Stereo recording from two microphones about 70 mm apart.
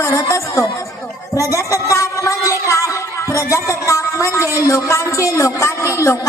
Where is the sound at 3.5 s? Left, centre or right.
Left.